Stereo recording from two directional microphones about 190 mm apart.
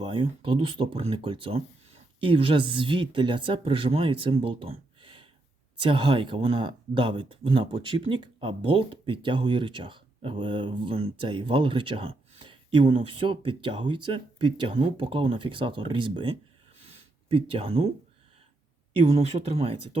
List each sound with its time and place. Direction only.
0.0 s speech: 25° right (ahead or behind)
16.8 s a sound: 30° right (ahead or behind)
19.0 s speech: 35° right (ahead or behind)